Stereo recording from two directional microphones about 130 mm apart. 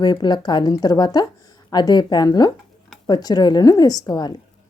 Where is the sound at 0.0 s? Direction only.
35° left (ahead or behind).